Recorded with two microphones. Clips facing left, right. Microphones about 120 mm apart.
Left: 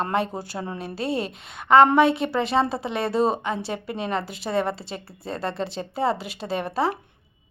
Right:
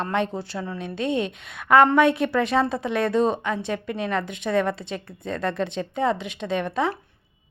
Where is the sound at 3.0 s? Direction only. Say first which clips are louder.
Even; 35° left (ahead or behind).